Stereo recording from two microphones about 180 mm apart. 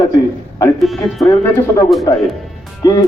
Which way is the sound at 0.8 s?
Centre (ahead or behind).